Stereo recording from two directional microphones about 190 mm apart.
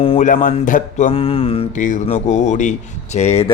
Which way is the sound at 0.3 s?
45° left (ahead or behind).